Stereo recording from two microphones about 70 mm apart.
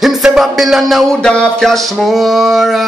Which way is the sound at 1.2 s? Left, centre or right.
Centre.